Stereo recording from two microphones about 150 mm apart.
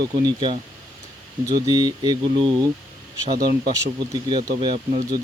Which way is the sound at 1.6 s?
25° right (ahead or behind).